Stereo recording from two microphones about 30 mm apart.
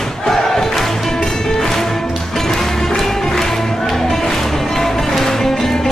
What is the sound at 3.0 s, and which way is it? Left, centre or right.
Music, centre.